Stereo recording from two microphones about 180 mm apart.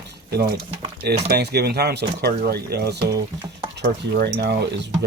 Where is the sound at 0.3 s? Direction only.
60° right (ahead or behind).